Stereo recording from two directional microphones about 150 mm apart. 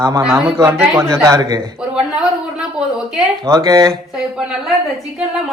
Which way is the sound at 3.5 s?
25° right (ahead or behind).